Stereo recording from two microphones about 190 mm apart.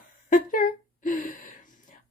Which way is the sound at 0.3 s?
45° left (ahead or behind).